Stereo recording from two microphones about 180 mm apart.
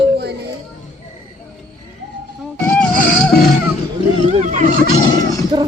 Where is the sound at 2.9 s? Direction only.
50° left (ahead or behind).